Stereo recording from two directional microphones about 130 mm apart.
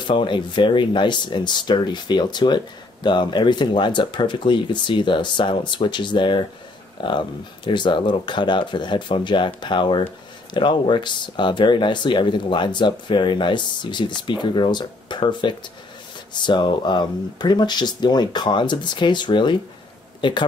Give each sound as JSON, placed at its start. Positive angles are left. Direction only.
{"t": 0.0, "sound": "speech", "side_deg": 40}